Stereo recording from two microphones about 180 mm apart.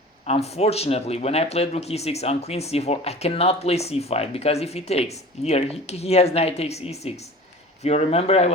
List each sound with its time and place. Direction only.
0.3 s speech: 35° left (ahead or behind)